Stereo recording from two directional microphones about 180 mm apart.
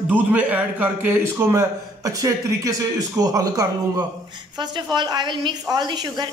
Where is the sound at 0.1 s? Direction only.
10° right (ahead or behind).